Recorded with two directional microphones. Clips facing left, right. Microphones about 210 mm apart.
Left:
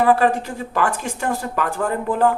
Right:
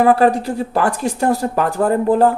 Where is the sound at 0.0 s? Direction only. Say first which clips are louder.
Right 4 dB; 40° right (ahead or behind).